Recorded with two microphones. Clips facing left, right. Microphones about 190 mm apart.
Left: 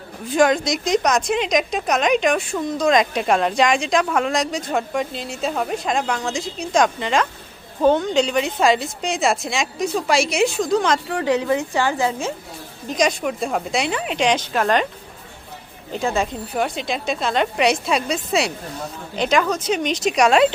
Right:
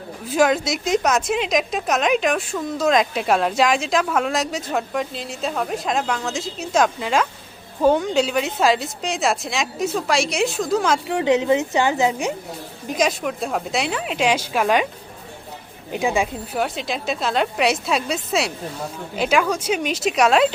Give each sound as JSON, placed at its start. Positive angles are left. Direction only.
{"t": 0.3, "sound": "a woman's voice", "side_deg": -5}
{"t": 11.0, "sound": "a woman's voice", "side_deg": -20}
{"t": 12.9, "sound": "a woman's voice", "side_deg": -5}
{"t": 15.9, "sound": "a woman's voice", "side_deg": -15}